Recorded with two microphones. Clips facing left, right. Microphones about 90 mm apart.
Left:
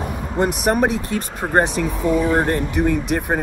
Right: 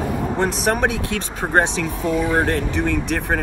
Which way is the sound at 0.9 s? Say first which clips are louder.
Left 1 dB; 90° right.